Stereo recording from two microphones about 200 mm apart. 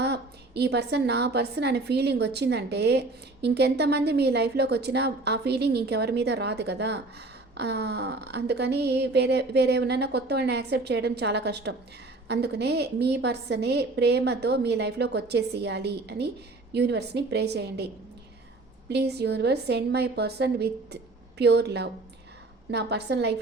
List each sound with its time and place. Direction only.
0.0 s speech: 55° right (ahead or behind)
18.9 s speech: 55° right (ahead or behind)